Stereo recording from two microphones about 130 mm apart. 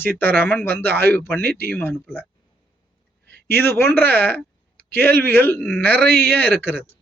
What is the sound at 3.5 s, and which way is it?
Speech, 20° left (ahead or behind).